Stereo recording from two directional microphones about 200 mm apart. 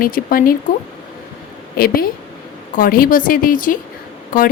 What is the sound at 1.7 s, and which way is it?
A woman's voice, 45° left (ahead or behind).